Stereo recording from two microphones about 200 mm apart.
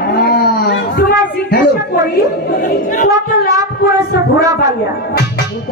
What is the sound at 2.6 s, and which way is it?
Speech, 40° left (ahead or behind).